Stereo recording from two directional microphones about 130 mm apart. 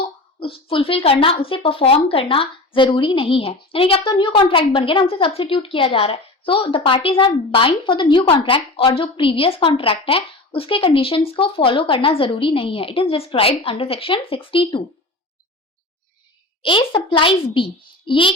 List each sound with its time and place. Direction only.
0.3 s a woman's voice: 45° left (ahead or behind)
16.6 s a child's voice: 40° left (ahead or behind)